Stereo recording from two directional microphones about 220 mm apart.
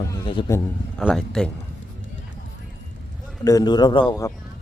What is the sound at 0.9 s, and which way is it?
Speech, centre (ahead or behind).